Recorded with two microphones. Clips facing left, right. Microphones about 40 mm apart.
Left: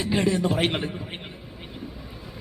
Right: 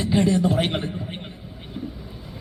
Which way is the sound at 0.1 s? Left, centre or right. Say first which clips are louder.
Right 3 dB; centre.